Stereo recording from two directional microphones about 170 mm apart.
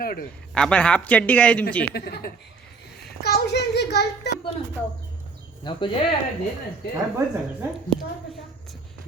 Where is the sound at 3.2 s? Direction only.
70° left (ahead or behind).